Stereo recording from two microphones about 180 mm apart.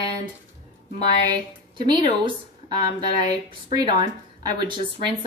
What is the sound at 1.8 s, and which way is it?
Speech, 25° right (ahead or behind).